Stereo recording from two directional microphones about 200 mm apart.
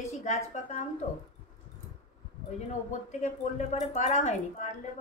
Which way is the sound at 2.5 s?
35° left (ahead or behind).